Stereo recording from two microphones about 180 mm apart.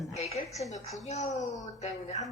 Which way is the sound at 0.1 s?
35° left (ahead or behind).